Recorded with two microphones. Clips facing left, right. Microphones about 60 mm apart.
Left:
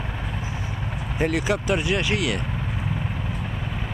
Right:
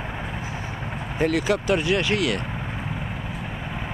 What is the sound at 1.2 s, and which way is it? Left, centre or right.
Speech, centre.